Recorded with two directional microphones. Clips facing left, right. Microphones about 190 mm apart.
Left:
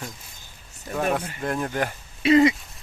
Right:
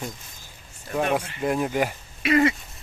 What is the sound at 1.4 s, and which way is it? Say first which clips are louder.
Speech: right 3 dB; 10° right (ahead or behind).